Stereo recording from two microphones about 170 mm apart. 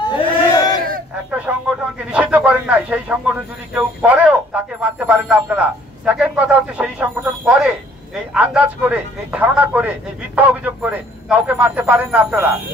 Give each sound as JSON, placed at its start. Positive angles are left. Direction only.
{"t": 0.1, "sound": "crowd", "side_deg": 30}
{"t": 1.5, "sound": "a sound", "side_deg": -10}
{"t": 2.1, "sound": "speech", "side_deg": -5}